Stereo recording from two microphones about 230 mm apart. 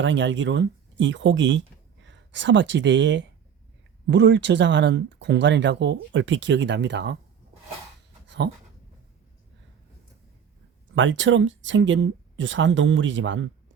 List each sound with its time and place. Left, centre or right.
0.0 s speech: right
10.9 s speech: right